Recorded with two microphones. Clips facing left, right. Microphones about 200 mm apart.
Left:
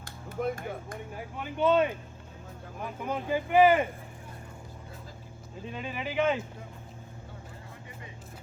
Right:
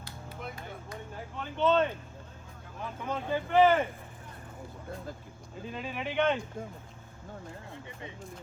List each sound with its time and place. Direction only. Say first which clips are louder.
0.0 s a sound: left 10 dB; 50° left (ahead or behind)
1.1 s speech: left 2 dB; 10° left (ahead or behind)
5.6 s speech: even; centre (ahead or behind)